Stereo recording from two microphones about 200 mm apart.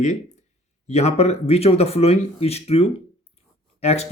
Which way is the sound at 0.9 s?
35° left (ahead or behind).